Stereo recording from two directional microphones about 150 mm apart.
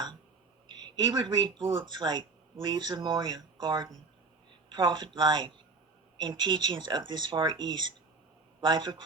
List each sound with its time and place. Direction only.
0.7 s speech: 30° right (ahead or behind)